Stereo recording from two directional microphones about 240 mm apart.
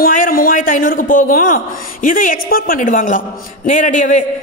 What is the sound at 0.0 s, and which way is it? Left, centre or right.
A man's voice, left.